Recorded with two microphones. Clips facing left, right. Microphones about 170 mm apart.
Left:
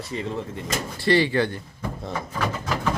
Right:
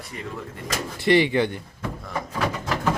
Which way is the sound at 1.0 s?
20° right (ahead or behind).